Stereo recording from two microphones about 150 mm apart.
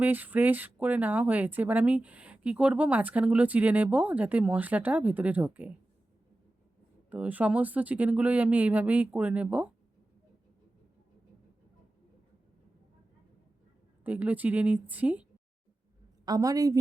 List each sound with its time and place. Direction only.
0.0 s speech: 10° right (ahead or behind)
7.1 s speech: 10° right (ahead or behind)
14.0 s speech: 10° right (ahead or behind)
16.2 s a woman's voice: 25° right (ahead or behind)